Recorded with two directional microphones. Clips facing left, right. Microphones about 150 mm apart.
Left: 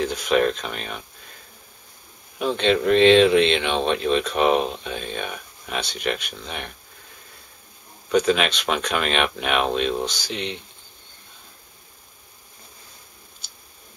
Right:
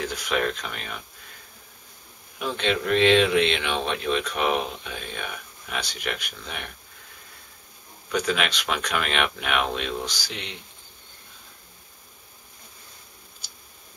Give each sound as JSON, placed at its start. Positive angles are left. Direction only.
{"t": 0.0, "sound": "speech", "side_deg": 25}
{"t": 2.3, "sound": "speech", "side_deg": 25}
{"t": 8.1, "sound": "speech", "side_deg": 25}